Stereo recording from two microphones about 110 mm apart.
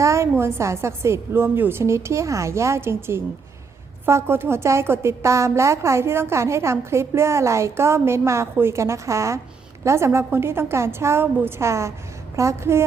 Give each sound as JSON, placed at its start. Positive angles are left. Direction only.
{"t": 0.0, "sound": "a woman's voice", "side_deg": -25}